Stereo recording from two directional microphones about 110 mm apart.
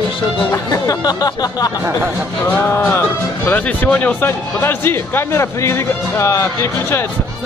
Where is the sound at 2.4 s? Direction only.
15° left (ahead or behind).